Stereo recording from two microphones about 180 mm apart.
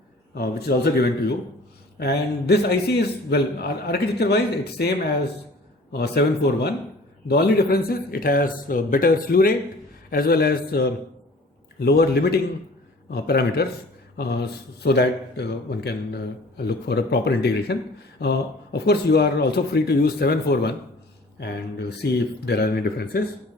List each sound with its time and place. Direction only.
0.3 s a man's voice: 60° left (ahead or behind)